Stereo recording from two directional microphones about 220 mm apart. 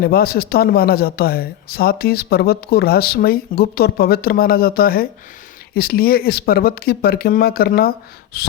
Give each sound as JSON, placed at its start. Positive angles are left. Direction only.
{"t": 0.0, "sound": "a man's voice", "side_deg": 45}